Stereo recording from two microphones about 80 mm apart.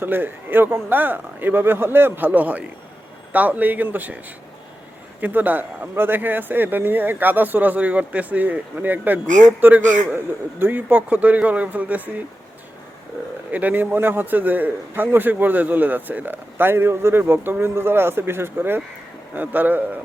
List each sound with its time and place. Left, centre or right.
0.0 s a man's voice: right
5.2 s a man's voice: right
13.5 s a man's voice: right